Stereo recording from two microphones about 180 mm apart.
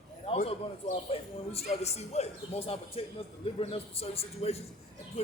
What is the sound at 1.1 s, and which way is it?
A man's voice, 35° left (ahead or behind).